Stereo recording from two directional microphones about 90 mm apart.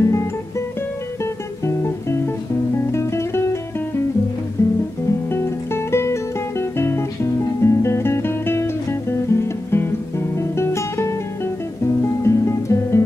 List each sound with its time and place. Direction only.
0.0 s music: 30° left (ahead or behind)
4.6 s guitar: 30° left (ahead or behind)
5.3 s music: 30° left (ahead or behind)
9.3 s guitar: 30° left (ahead or behind)